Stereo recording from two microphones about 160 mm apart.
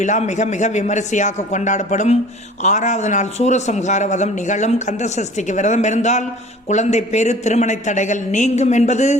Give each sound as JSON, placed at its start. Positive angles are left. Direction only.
{"t": 0.0, "sound": "a man's voice", "side_deg": 50}